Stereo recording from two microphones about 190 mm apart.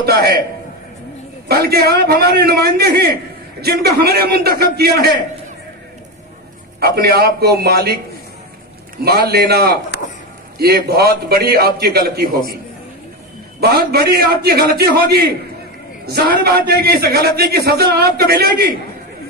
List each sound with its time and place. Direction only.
0.0 s a man's voice: 55° right (ahead or behind)
1.5 s a man's voice: 55° right (ahead or behind)
6.8 s a man's voice: 55° right (ahead or behind)
9.0 s a man's voice: 55° right (ahead or behind)
10.9 s a man's voice: 55° right (ahead or behind)
13.6 s a man's voice: 55° right (ahead or behind)